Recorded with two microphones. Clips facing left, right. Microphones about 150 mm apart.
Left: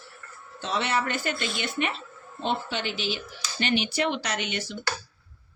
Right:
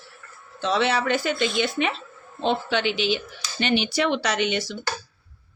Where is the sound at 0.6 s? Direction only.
90° right; by 3.2 s 75° right (ahead or behind).